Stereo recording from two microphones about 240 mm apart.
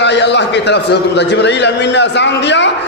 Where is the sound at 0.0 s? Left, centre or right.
Left.